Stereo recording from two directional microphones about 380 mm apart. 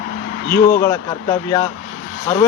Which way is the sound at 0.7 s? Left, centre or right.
Centre.